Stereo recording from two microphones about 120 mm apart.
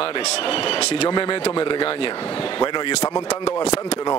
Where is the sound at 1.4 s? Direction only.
50° left (ahead or behind).